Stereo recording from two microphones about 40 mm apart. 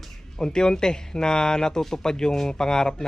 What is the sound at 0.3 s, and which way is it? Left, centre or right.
Speech, centre.